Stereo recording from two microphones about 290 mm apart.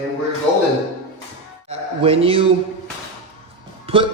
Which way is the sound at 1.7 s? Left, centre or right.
Centre.